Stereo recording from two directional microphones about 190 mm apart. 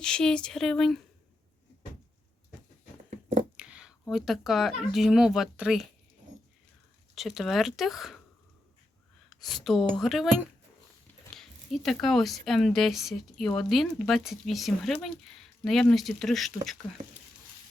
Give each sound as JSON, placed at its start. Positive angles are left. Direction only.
{"t": 0.0, "sound": "speech", "side_deg": 5}
{"t": 3.6, "sound": "speech", "side_deg": -5}
{"t": 7.2, "sound": "speech", "side_deg": 0}
{"t": 9.3, "sound": "speech", "side_deg": 0}